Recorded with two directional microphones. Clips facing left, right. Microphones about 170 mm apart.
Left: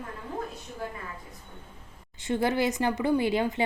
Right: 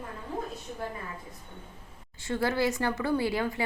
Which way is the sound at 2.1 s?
20° left (ahead or behind).